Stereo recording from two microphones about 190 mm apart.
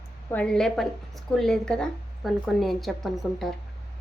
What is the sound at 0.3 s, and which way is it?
A woman's voice, 5° left (ahead or behind).